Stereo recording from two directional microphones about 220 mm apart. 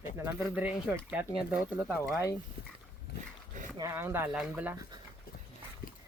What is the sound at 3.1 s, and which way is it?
Speech, 50° left (ahead or behind).